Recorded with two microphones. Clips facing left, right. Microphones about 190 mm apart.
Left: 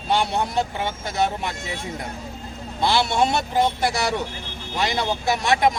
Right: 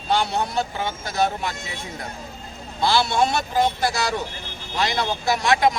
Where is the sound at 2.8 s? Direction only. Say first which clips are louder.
Even; 20° left (ahead or behind).